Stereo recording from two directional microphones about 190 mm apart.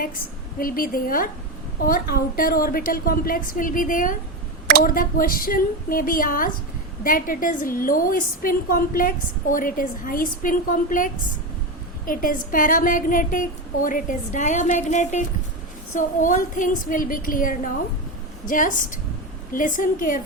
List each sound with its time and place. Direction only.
0.0 s a woman's voice: 50° left (ahead or behind)